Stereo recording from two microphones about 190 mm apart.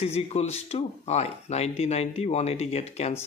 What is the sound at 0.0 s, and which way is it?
Speech, 35° left (ahead or behind).